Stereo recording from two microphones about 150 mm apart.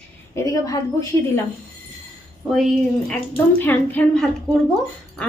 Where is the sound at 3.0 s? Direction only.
10° left (ahead or behind).